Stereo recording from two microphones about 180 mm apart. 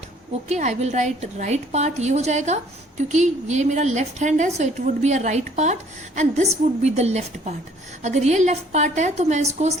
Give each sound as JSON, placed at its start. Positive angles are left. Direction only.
{"t": 0.4, "sound": "a woman's voice", "side_deg": -35}